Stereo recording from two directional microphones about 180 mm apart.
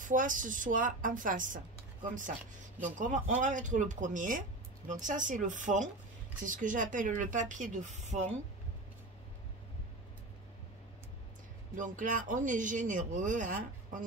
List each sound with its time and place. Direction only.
0.0 s speech: 45° right (ahead or behind)
2.8 s speech: 45° right (ahead or behind)
11.7 s speech: 45° right (ahead or behind)